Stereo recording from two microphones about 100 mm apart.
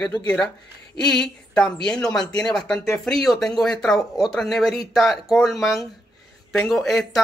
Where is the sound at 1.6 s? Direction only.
10° left (ahead or behind).